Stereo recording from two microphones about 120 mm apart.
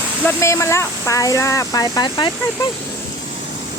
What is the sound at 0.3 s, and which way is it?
Speech, 25° left (ahead or behind).